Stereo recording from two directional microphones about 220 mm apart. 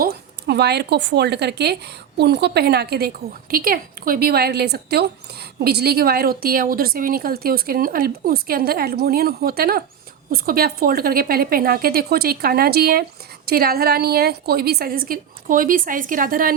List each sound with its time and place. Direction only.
0.0 s a woman's voice: 45° right (ahead or behind)